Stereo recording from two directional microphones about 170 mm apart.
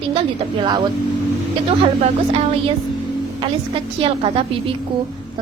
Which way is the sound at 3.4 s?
30° right (ahead or behind).